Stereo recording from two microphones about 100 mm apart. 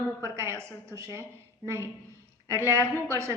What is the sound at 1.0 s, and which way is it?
Speech, 30° right (ahead or behind).